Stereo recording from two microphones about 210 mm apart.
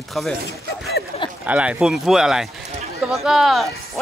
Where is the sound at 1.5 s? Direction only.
5° right (ahead or behind).